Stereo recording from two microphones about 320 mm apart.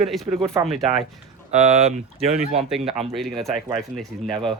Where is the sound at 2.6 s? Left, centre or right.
Centre.